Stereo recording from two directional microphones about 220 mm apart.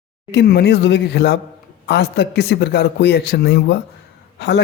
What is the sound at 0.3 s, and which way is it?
Speech, 50° left (ahead or behind).